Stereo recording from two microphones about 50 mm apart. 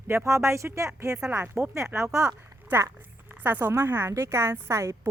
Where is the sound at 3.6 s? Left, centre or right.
Right.